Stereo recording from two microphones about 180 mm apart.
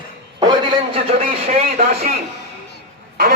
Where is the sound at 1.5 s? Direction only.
35° right (ahead or behind).